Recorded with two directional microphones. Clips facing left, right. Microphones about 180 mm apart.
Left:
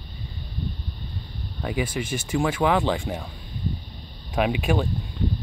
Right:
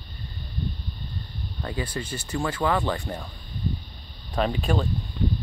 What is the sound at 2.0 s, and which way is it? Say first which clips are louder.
Speech: left 5 dB; 90° left.